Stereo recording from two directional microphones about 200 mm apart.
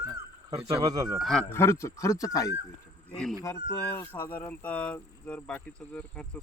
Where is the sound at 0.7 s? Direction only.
20° right (ahead or behind).